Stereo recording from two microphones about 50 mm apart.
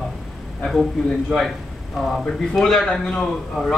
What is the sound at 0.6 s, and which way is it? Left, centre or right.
A man's voice, centre.